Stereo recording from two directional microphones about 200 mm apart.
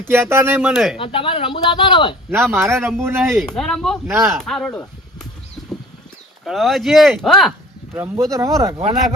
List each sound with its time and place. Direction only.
0.0 s speech: 10° right (ahead or behind)
0.9 s speech: 25° left (ahead or behind)
2.3 s speech: 10° right (ahead or behind)
3.3 s speech: centre (ahead or behind)
6.4 s speech: centre (ahead or behind)
7.9 s speech: 10° right (ahead or behind)